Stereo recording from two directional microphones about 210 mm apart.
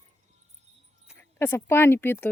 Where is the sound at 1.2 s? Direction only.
10° left (ahead or behind).